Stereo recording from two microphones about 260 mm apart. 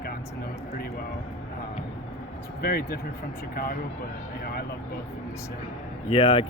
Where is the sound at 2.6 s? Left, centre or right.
Left.